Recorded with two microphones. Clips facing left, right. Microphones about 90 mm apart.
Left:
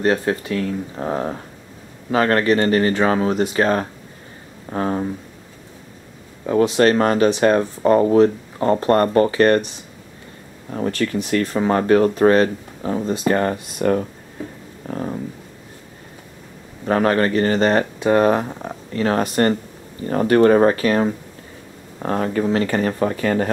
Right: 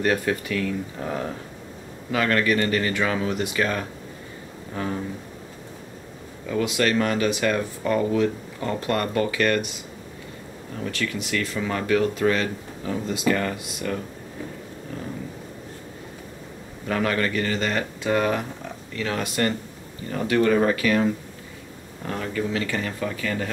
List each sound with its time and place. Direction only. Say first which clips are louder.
0.0 s speech: left 4 dB; 30° left (ahead or behind)
6.4 s speech: left 8 dB; 35° left (ahead or behind)
16.8 s speech: left 7 dB; 40° left (ahead or behind)